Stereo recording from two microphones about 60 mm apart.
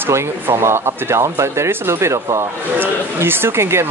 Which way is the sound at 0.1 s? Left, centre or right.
Right.